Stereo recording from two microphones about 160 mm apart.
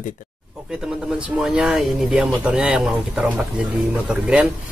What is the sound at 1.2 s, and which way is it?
Speech, 5° right (ahead or behind).